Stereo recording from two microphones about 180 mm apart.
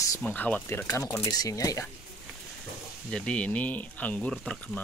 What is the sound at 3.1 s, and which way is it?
Speech, 5° left (ahead or behind).